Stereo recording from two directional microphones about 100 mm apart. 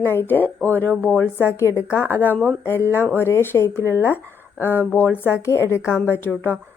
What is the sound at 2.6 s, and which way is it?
A woman's voice, 25° left (ahead or behind).